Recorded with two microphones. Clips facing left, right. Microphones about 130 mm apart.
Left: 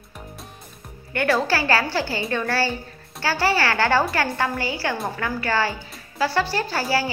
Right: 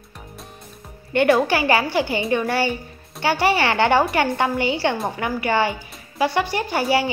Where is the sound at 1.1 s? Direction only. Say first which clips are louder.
Right 4 dB; 20° right (ahead or behind).